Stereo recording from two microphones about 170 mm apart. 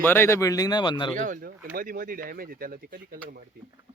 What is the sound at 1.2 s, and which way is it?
Speech, 50° right (ahead or behind).